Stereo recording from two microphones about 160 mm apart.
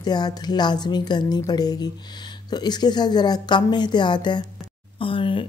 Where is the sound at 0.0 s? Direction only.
25° left (ahead or behind).